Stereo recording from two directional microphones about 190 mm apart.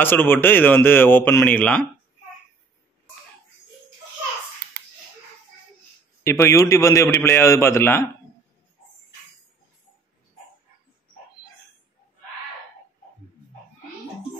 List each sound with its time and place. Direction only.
0.0 s a man's voice: 10° left (ahead or behind)
4.6 s a sound: 55° right (ahead or behind)
6.2 s a man's voice: 15° left (ahead or behind)